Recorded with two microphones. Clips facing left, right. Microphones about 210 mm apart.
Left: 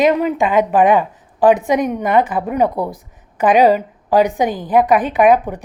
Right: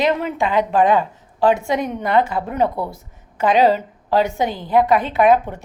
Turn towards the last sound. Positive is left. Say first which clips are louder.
# left 2 dB
turn(degrees=15)  # may be behind; listen again after turning